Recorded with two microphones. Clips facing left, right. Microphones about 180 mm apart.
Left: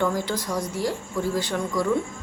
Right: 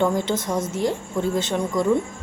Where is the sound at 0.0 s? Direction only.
20° right (ahead or behind).